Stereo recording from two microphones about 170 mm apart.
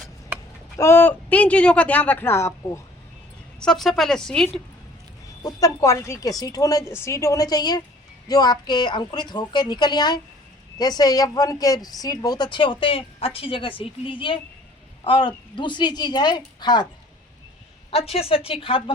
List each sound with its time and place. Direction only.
0.8 s speech: 15° left (ahead or behind)
3.6 s a woman's voice: centre (ahead or behind)
5.4 s a woman's voice: 20° left (ahead or behind)
17.9 s a woman's voice: 35° left (ahead or behind)